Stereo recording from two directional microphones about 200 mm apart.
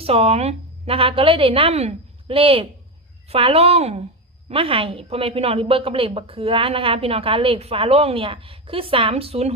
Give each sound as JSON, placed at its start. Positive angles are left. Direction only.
{"t": 0.0, "sound": "a woman's voice", "side_deg": -30}